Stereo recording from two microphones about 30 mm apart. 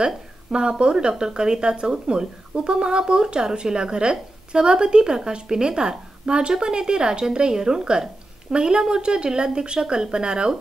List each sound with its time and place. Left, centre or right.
0.0 s a woman's voice: right